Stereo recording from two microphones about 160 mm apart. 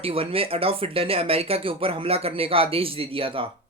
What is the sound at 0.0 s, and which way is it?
Speech, 35° right (ahead or behind).